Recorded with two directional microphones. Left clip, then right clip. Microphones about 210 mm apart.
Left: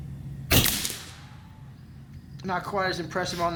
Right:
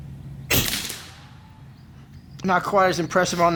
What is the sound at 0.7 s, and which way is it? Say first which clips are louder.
Whip: right 2 dB; centre (ahead or behind).